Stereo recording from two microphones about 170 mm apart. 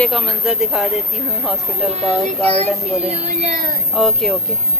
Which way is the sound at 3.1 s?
40° right (ahead or behind).